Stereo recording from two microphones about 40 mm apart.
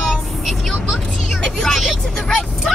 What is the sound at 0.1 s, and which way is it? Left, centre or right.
Vehicle, centre.